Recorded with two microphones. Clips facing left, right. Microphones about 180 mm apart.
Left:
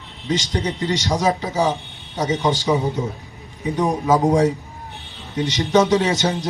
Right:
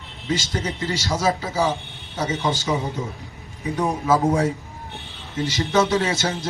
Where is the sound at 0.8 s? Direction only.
15° left (ahead or behind).